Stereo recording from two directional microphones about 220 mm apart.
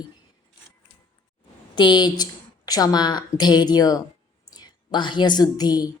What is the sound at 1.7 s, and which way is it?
A woman's voice, 20° left (ahead or behind).